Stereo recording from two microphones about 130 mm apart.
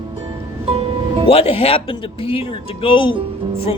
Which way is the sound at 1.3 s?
50° left (ahead or behind).